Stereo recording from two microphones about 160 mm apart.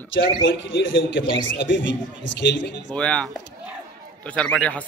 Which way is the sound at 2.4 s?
90° left.